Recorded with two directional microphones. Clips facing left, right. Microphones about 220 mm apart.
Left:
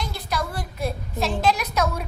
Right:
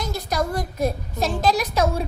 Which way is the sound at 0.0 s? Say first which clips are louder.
Right 4 dB; 45° right (ahead or behind).